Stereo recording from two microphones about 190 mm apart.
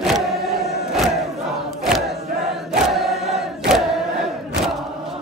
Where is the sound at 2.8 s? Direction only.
Centre (ahead or behind).